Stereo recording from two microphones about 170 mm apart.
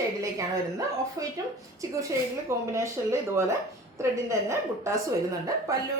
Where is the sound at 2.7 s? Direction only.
15° right (ahead or behind).